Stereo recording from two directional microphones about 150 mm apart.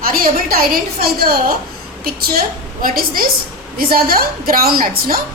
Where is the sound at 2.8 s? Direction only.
70° right (ahead or behind).